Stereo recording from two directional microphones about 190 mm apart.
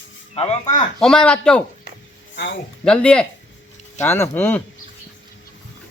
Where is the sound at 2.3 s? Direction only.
65° left (ahead or behind).